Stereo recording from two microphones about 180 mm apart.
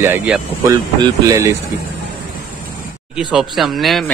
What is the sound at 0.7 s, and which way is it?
Speech, 20° right (ahead or behind).